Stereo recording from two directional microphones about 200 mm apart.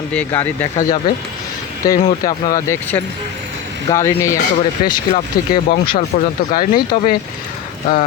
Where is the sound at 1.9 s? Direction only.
20° left (ahead or behind).